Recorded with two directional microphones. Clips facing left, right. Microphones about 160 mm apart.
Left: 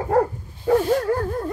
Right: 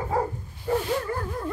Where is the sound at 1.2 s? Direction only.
45° left (ahead or behind).